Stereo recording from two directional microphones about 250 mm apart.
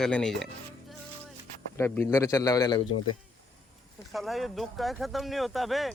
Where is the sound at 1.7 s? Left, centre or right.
Centre.